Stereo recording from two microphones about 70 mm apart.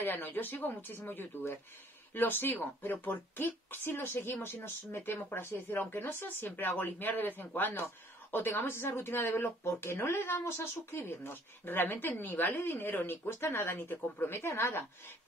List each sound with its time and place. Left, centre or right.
0.0 s speech: left
14.3 s speech: left